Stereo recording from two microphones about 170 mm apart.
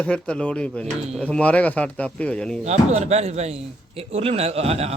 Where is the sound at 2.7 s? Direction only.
40° right (ahead or behind).